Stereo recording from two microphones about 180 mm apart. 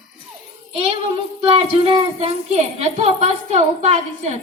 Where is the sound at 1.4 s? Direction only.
30° right (ahead or behind).